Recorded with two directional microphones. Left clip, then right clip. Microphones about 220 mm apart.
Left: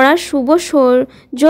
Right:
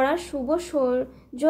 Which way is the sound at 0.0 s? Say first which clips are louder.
Left 12 dB; 40° left (ahead or behind).